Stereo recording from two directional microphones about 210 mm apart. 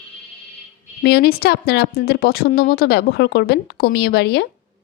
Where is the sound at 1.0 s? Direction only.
50° left (ahead or behind).